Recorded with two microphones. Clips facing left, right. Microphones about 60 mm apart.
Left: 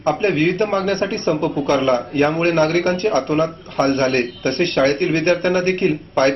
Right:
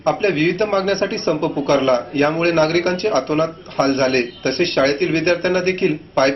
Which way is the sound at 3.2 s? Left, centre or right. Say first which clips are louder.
Even; centre.